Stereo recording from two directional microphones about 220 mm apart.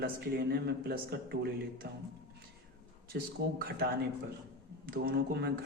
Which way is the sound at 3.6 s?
45° right (ahead or behind).